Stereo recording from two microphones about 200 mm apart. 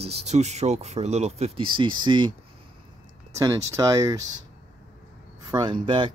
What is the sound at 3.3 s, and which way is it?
Speech, 15° right (ahead or behind).